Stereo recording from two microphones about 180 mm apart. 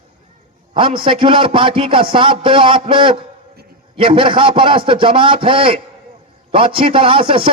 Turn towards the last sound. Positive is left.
turn(degrees=-30)  # may be behind; listen again after turning